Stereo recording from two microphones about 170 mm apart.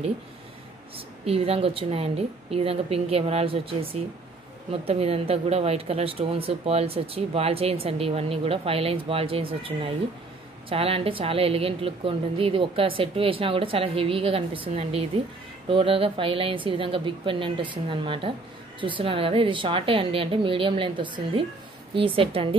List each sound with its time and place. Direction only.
0.9 s speech: 35° right (ahead or behind)